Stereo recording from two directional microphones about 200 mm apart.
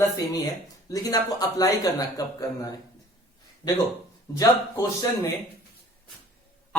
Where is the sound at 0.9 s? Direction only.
20° left (ahead or behind).